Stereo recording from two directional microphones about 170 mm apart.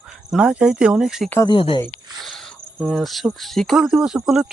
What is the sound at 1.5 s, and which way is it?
Speech, 30° left (ahead or behind).